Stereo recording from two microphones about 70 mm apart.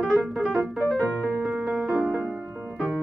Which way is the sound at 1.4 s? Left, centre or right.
Centre.